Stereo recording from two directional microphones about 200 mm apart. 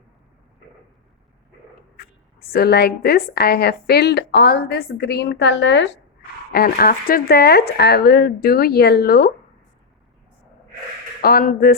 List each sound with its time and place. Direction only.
2.0 s a woman's voice: 50° left (ahead or behind); by 5.9 s 65° left (ahead or behind)
6.5 s a woman's voice: 50° left (ahead or behind)
11.2 s a woman's voice: 50° left (ahead or behind)